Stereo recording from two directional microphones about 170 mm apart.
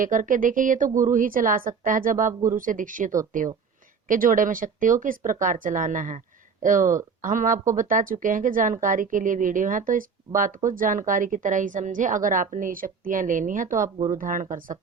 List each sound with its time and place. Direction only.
0.0 s speech: 50° right (ahead or behind)